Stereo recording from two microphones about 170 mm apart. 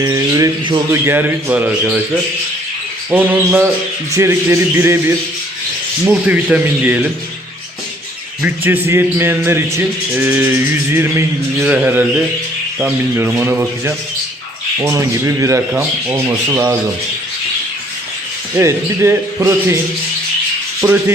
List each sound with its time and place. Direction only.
0.0 s a sound: 20° right (ahead or behind)
1.0 s a man's voice: 10° right (ahead or behind)
3.1 s a man's voice: 10° right (ahead or behind)
8.4 s a man's voice: 10° right (ahead or behind)
18.5 s a man's voice: 15° right (ahead or behind)
20.8 s a man's voice: 15° right (ahead or behind)